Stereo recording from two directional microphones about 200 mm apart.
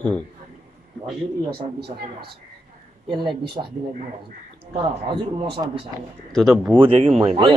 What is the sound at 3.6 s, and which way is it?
Speech, 25° right (ahead or behind).